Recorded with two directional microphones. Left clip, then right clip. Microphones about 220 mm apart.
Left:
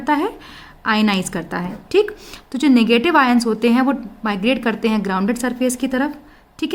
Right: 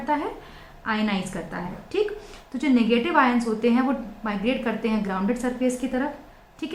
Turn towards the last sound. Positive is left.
turn(degrees=55)  # may be behind; listen again after turning